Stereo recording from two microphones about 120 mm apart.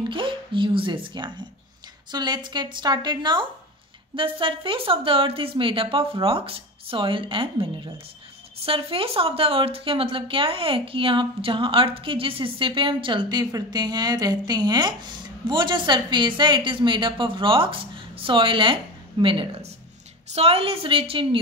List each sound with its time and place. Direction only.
0.1 s a woman's voice: 45° right (ahead or behind)
20.2 s a woman's voice: 60° right (ahead or behind)